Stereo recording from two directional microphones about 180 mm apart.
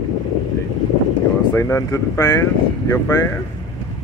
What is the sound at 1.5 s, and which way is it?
Speech, 15° left (ahead or behind).